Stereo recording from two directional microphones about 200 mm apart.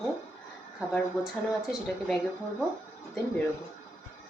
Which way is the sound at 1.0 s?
Centre (ahead or behind).